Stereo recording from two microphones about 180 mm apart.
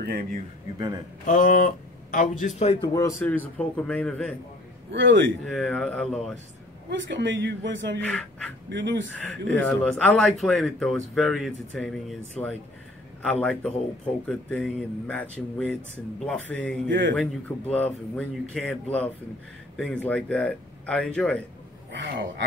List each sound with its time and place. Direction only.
0.0 s speech: 60° right (ahead or behind)
1.2 s speech: 50° left (ahead or behind)
2.9 s speech: 15° left (ahead or behind)
4.9 s speech: 85° right
5.4 s speech: centre (ahead or behind)
6.9 s speech: 85° right
9.1 s speech: 10° left (ahead or behind)
21.9 s speech: 75° right (ahead or behind)